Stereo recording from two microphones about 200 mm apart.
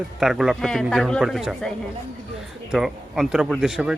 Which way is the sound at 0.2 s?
Centre (ahead or behind).